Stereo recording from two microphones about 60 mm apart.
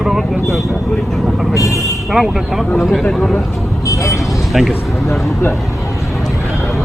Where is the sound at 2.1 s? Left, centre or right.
Centre.